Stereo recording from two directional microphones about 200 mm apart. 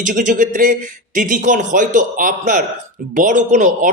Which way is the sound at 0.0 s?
40° right (ahead or behind).